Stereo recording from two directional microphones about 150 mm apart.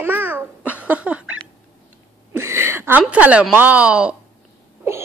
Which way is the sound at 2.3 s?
15° right (ahead or behind).